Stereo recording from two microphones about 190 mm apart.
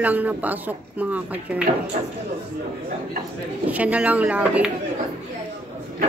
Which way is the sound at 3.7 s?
5° right (ahead or behind).